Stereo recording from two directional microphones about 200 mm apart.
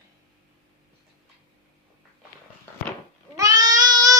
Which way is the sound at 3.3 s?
20° right (ahead or behind).